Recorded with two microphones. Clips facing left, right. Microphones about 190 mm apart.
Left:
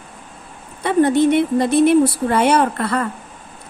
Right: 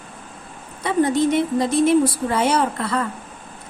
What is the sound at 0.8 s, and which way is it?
A woman's voice, 60° left (ahead or behind).